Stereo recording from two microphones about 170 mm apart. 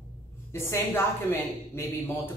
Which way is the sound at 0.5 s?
15° left (ahead or behind).